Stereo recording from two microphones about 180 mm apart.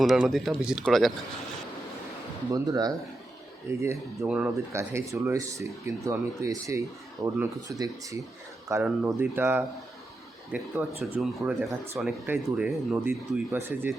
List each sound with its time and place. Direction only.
0.0 s speech: centre (ahead or behind)
2.5 s speech: 20° right (ahead or behind)